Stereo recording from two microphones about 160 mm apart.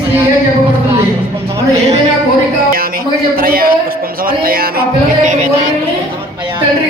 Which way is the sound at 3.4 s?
65° right (ahead or behind).